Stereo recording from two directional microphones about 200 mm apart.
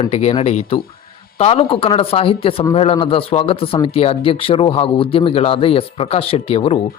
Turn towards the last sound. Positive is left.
turn(degrees=30)  # may be behind; listen again after turning